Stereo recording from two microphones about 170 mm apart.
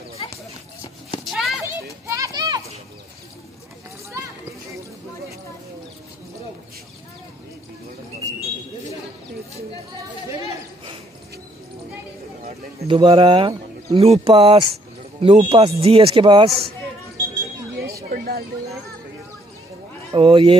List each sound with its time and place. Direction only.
1.2 s a sound: centre (ahead or behind)
1.6 s children playing: 15° right (ahead or behind)
12.4 s bird: 35° right (ahead or behind)
14.0 s speech: 35° right (ahead or behind)
18.1 s a sound: 60° right (ahead or behind)
20.2 s speech: 35° right (ahead or behind)